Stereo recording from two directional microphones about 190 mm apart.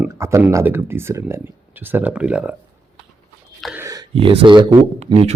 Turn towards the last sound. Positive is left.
turn(degrees=-30)  # may be behind; listen again after turning